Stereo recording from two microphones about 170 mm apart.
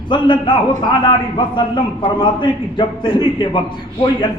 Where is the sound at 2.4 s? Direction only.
30° left (ahead or behind).